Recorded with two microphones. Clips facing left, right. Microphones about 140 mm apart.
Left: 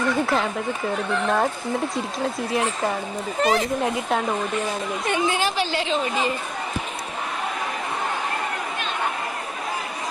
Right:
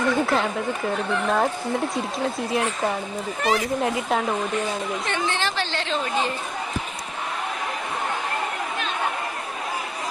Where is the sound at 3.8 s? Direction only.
Centre (ahead or behind).